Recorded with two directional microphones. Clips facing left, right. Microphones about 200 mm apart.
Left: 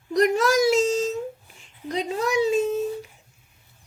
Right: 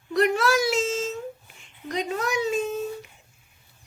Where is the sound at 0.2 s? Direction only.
40° left (ahead or behind).